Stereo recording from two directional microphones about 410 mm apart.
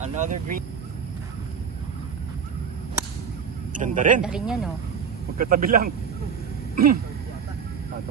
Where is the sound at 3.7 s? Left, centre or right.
Centre.